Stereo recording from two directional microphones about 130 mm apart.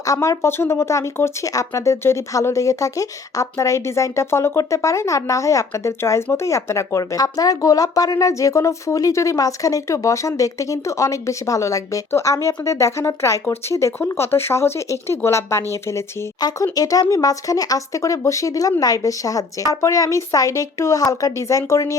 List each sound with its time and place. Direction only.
0.0 s speech: 25° left (ahead or behind)